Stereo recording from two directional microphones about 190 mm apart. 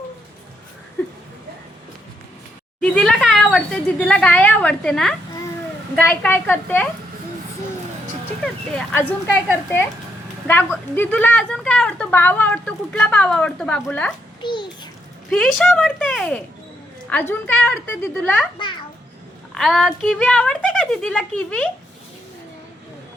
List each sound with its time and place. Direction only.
2.8 s a woman's voice: 5° left (ahead or behind)
8.7 s a woman's voice: 10° left (ahead or behind)
10.4 s a woman's voice: 10° left (ahead or behind)
14.4 s babbling: 25° left (ahead or behind)
15.3 s a woman's voice: centre (ahead or behind)
19.5 s speech: centre (ahead or behind)